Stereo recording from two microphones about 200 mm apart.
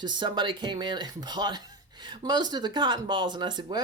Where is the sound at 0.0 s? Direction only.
20° right (ahead or behind).